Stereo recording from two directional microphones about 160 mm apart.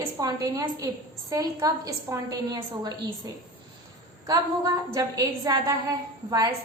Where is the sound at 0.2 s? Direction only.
20° right (ahead or behind).